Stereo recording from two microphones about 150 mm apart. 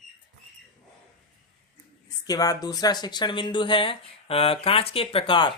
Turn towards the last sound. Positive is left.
turn(degrees=35)  # may be behind; listen again after turning